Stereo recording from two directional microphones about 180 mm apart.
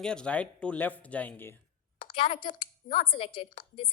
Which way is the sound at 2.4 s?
35° left (ahead or behind).